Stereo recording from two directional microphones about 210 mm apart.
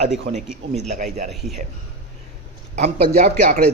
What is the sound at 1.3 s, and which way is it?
Speech, centre (ahead or behind).